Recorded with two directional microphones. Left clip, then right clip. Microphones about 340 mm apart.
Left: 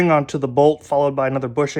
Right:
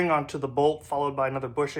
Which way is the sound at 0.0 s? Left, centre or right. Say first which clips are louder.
Left 8 dB; left.